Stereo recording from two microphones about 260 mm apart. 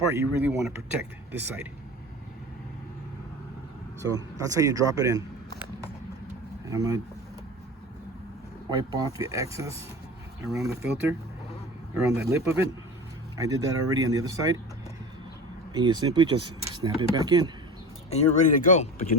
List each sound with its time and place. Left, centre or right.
0.0 s speech: centre
4.0 s speech: centre
6.7 s speech: centre
9.0 s speech: centre
12.1 s speech: centre
15.7 s speech: centre
18.1 s speech: left